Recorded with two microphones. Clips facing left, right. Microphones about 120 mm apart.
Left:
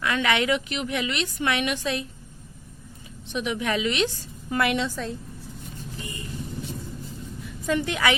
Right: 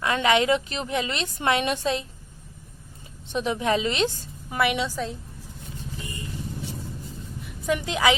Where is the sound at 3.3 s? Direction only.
35° right (ahead or behind).